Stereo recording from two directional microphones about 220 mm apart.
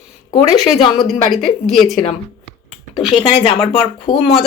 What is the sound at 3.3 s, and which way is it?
Speech, 25° left (ahead or behind).